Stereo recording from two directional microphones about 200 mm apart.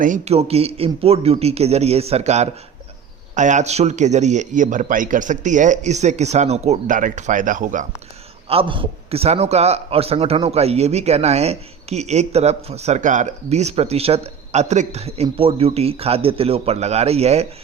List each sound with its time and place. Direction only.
0.0 s a man's voice: 35° right (ahead or behind)
8.4 s a man's voice: 25° right (ahead or behind)